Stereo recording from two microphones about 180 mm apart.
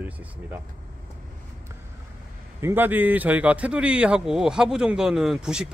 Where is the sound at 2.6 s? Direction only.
10° right (ahead or behind).